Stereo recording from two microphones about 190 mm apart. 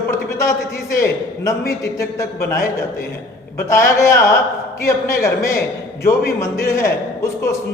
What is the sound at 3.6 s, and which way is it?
A man's voice, 15° left (ahead or behind).